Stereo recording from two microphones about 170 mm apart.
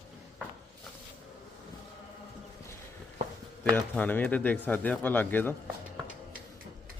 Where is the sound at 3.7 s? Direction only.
10° left (ahead or behind).